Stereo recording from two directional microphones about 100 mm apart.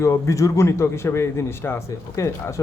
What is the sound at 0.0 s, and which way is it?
Speech, 30° left (ahead or behind).